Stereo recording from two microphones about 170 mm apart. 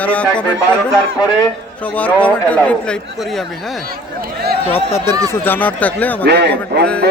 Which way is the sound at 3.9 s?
65° right (ahead or behind).